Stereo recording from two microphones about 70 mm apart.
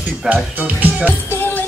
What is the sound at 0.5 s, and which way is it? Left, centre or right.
Speech, right.